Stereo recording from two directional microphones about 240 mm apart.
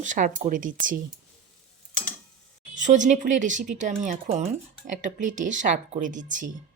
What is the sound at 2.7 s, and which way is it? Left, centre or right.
Speech, right.